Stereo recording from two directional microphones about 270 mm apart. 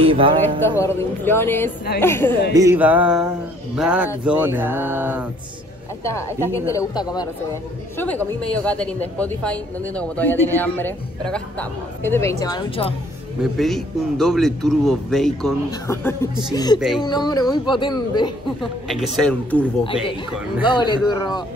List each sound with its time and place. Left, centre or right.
0.0 s speech: centre
0.7 s a woman's voice: centre
2.5 s a woman's voice: centre
4.2 s a sound: centre
6.5 s a woman's voice: centre
13.4 s a woman's voice: centre
18.6 s a woman's voice: centre
20.6 s a woman's voice: centre